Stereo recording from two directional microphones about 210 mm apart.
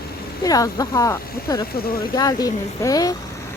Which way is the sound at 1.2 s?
45° left (ahead or behind).